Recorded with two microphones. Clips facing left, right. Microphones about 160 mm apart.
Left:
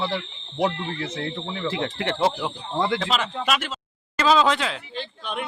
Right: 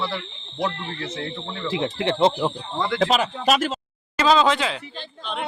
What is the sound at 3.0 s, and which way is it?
Speech, 45° right (ahead or behind).